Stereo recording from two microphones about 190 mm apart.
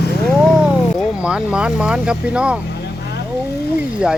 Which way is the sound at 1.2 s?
5° right (ahead or behind).